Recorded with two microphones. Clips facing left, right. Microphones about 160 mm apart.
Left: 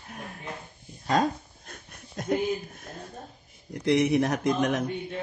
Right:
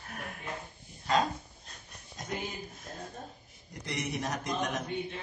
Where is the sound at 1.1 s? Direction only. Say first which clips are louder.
Left 4 dB; 50° left (ahead or behind).